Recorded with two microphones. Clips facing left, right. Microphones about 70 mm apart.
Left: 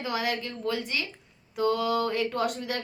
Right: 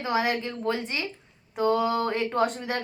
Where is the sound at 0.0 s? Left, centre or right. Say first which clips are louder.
Right 4 dB; right.